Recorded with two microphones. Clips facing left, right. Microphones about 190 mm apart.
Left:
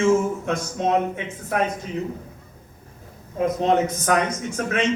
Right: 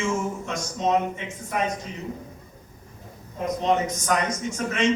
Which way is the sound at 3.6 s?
60° left (ahead or behind).